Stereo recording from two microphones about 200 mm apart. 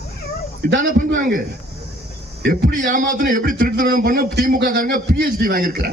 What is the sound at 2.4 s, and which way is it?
A man's voice, 40° right (ahead or behind).